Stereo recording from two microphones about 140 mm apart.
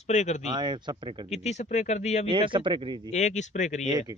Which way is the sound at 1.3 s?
55° left (ahead or behind).